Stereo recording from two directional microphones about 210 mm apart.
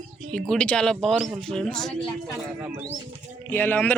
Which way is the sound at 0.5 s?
5° left (ahead or behind).